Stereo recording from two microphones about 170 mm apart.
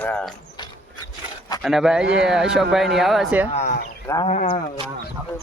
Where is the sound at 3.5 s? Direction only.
45° left (ahead or behind).